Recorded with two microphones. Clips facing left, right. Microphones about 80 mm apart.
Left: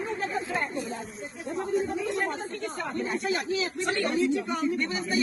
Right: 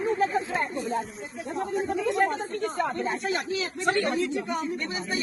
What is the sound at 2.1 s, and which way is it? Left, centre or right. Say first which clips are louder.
Speech: right 5 dB; right.